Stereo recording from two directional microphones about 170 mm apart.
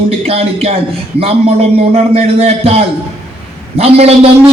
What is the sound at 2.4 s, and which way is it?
A man's voice, 35° right (ahead or behind).